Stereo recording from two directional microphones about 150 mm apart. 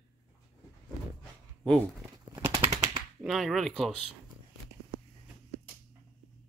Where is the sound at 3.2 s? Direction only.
Centre (ahead or behind).